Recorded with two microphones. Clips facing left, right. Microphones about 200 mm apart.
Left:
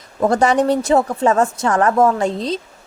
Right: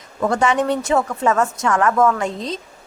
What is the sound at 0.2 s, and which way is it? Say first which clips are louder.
A woman's voice: left 3 dB; 35° left (ahead or behind).